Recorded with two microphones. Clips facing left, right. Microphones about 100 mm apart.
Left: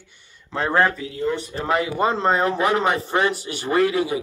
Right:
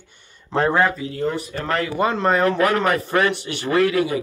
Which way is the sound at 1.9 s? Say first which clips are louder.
Right 3 dB; 30° left (ahead or behind).